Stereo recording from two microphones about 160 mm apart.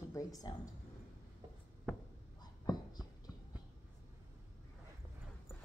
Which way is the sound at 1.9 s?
Centre (ahead or behind).